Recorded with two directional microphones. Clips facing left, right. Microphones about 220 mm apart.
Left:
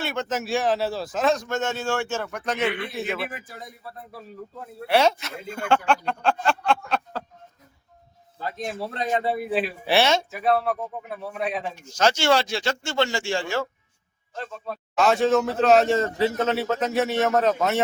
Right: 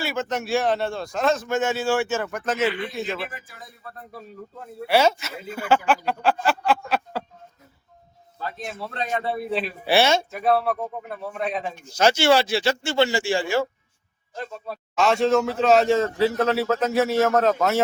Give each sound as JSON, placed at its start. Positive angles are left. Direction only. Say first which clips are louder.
{"t": 0.0, "sound": "a man's voice", "louder": "right 1 dB", "side_deg": 0}
{"t": 4.9, "sound": "a man's voice", "louder": "right 1 dB", "side_deg": 0}
{"t": 8.4, "sound": "a sound", "louder": "left 2 dB", "side_deg": 20}
{"t": 8.8, "sound": "speech", "louder": "right 1 dB", "side_deg": 30}
{"t": 9.0, "sound": "a man's voice", "louder": "left 2 dB", "side_deg": 15}
{"t": 14.7, "sound": "a man's voice", "louder": "even", "side_deg": 0}